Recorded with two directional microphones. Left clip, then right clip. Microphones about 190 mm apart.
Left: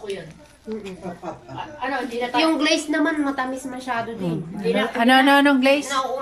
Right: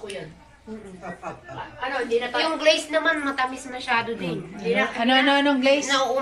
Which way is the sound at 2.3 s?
50° left (ahead or behind).